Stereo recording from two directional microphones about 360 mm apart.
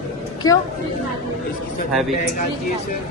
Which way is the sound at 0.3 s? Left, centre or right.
Centre.